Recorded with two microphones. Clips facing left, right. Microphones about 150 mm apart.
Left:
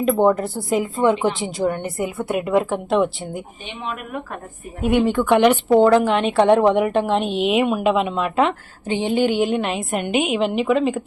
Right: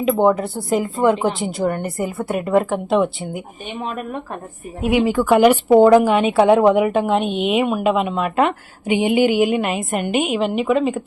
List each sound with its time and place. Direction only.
0.0 s a woman's voice: centre (ahead or behind)
3.8 s speech: 40° right (ahead or behind)
4.8 s a woman's voice: 5° right (ahead or behind)
8.9 s a woman's voice: 10° right (ahead or behind)